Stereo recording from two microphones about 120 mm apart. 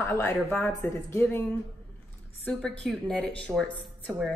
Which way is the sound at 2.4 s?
5° left (ahead or behind).